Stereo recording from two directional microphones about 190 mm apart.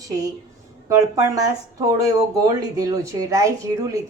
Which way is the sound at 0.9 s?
20° right (ahead or behind).